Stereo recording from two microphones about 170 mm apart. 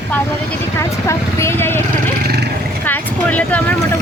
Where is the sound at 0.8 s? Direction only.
15° left (ahead or behind).